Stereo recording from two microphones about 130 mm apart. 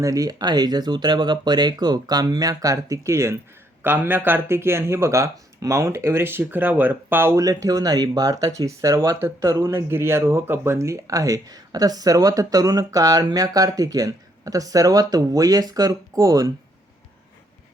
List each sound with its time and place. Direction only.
0.0 s speech: 25° right (ahead or behind)